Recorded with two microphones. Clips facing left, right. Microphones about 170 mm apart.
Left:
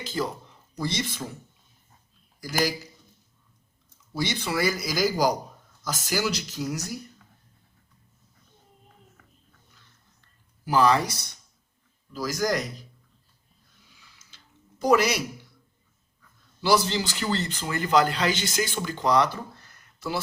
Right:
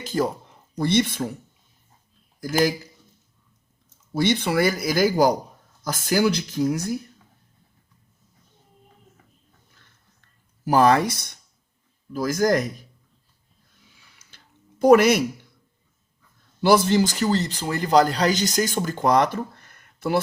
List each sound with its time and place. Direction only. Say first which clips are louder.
0.0 s speech: right 6 dB; 50° right (ahead or behind)
2.4 s speech: right 5 dB; 50° right (ahead or behind)
4.1 s speech: right 7 dB; 55° right (ahead or behind)
10.2 s a sound: even; 45° right (ahead or behind)
12.1 s speech: right 6 dB; 55° right (ahead or behind)
14.2 s a sound: right 1 dB; 55° right (ahead or behind)
16.6 s speech: right 6 dB; 55° right (ahead or behind)